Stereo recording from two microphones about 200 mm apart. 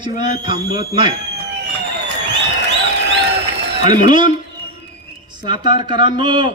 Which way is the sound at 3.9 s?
25° right (ahead or behind).